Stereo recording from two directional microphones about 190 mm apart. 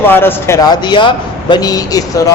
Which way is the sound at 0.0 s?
10° left (ahead or behind).